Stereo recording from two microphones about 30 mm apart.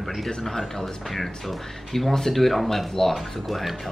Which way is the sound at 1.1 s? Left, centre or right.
Centre.